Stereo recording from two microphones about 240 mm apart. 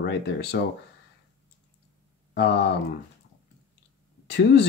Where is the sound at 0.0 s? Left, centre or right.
Left.